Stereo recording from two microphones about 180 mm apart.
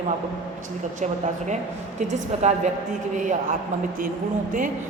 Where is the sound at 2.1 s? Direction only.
40° right (ahead or behind).